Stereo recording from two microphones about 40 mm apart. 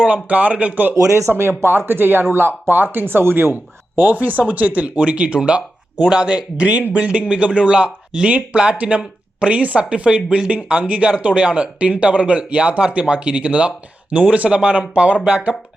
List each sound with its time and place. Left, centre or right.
0.0 s speech: right
1.3 s speech: right
1.9 s speech: right
3.9 s speech: right
10.5 s speech: right